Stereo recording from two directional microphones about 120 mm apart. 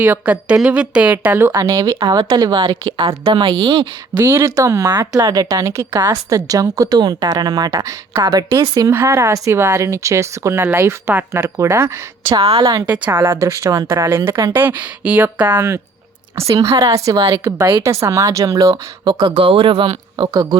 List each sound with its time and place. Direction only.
0.0 s a woman's voice: 15° right (ahead or behind); by 4.2 s 45° right (ahead or behind)
4.2 s speech: 20° right (ahead or behind)
12.4 s a woman's voice: 50° right (ahead or behind)
12.6 s speech: 35° right (ahead or behind)
13.1 s speech: 20° right (ahead or behind)
16.5 s speech: 25° right (ahead or behind); by 20.2 s 45° right (ahead or behind)
20.2 s speech: 30° right (ahead or behind)